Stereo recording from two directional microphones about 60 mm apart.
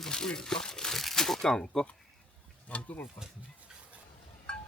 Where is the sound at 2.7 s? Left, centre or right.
Left.